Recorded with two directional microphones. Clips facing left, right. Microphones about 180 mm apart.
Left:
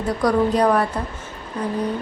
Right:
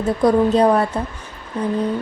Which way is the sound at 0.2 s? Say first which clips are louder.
Right 3 dB; 25° right (ahead or behind).